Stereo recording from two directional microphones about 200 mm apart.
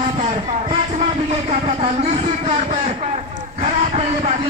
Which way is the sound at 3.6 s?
30° right (ahead or behind).